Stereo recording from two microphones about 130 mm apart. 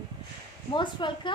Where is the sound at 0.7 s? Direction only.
35° left (ahead or behind).